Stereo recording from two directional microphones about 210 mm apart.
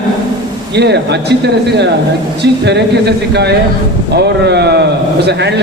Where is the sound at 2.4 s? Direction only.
55° right (ahead or behind).